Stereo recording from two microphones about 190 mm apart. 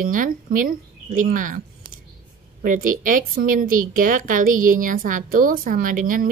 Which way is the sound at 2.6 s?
45° right (ahead or behind).